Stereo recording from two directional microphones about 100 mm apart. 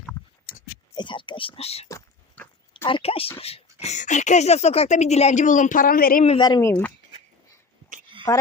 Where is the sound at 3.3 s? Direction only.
85° left.